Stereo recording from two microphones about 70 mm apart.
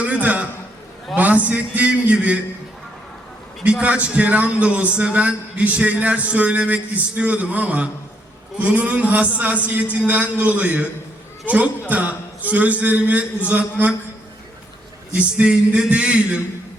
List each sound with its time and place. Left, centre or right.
0.0 s a man's voice: right
3.6 s a man's voice: centre
15.1 s a man's voice: centre